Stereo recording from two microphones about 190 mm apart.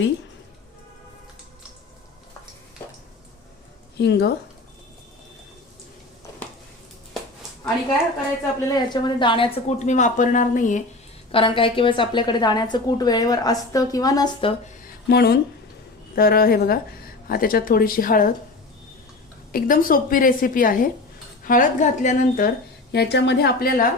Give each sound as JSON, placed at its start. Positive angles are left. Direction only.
{"t": 3.9, "sound": "speech", "side_deg": 60}
{"t": 8.7, "sound": "a woman's voice", "side_deg": 25}
{"t": 11.3, "sound": "a woman's voice", "side_deg": 30}
{"t": 15.1, "sound": "a woman's voice", "side_deg": 60}
{"t": 19.5, "sound": "a woman's voice", "side_deg": 45}
{"t": 22.9, "sound": "a woman's voice", "side_deg": 60}